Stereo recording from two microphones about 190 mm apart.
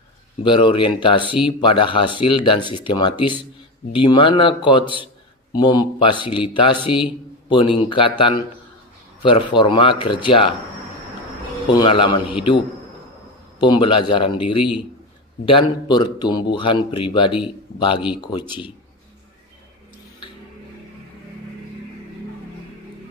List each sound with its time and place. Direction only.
0.4 s speech: 25° left (ahead or behind)
11.7 s speech: 25° left (ahead or behind)
13.6 s speech: 25° left (ahead or behind)